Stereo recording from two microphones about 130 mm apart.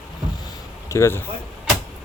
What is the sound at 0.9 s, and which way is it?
Speech, 20° left (ahead or behind).